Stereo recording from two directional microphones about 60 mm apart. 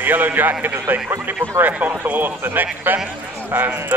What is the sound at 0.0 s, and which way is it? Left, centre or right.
Speech, right.